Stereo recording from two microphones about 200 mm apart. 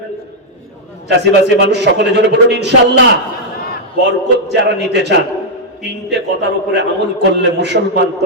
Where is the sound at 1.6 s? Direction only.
60° right (ahead or behind).